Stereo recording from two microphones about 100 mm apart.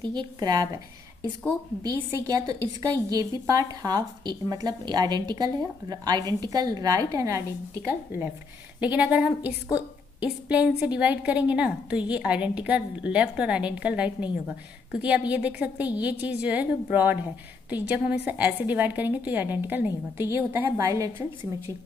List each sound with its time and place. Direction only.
0.0 s speech: 45° right (ahead or behind)
1.8 s a woman's voice: 35° right (ahead or behind)
8.7 s a woman's voice: 15° right (ahead or behind); by 21.1 s 30° right (ahead or behind)